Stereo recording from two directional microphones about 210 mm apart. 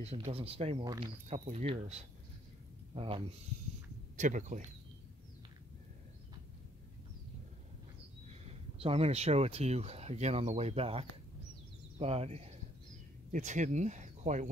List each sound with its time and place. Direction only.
0.0 s speech: 30° right (ahead or behind)
4.2 s speech: 35° right (ahead or behind)
8.3 s speech: 30° right (ahead or behind)